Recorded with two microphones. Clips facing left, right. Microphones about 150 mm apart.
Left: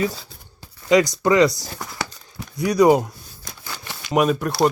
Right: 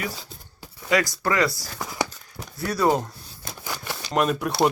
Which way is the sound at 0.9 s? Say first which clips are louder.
Left 7 dB; 20° left (ahead or behind).